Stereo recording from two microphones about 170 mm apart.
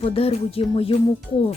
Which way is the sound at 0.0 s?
35° left (ahead or behind).